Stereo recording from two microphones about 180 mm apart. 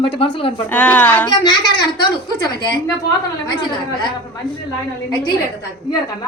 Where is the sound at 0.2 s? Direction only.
30° left (ahead or behind).